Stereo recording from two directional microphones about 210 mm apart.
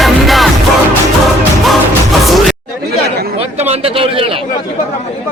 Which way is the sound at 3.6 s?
25° right (ahead or behind).